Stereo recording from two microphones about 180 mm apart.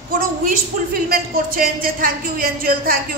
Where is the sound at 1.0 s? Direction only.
55° right (ahead or behind).